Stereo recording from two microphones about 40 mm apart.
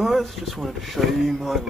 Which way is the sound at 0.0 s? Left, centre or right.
Centre.